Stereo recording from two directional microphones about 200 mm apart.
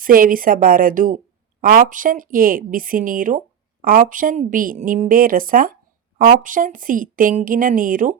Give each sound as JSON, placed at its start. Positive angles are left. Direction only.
{"t": 0.0, "sound": "speech", "side_deg": -45}